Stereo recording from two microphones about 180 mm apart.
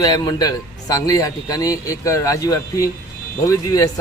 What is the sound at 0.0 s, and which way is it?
A man's voice, 20° left (ahead or behind).